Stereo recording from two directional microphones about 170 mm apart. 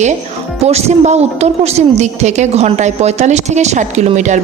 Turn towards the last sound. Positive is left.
turn(degrees=-45)  # may be behind; listen again after turning